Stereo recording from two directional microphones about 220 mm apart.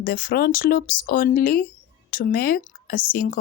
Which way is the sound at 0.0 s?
40° left (ahead or behind).